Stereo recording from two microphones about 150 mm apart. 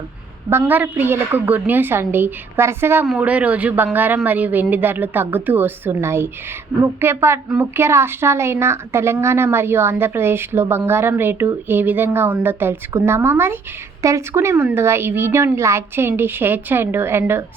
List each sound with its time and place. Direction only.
0.6 s a woman's voice: 10° right (ahead or behind)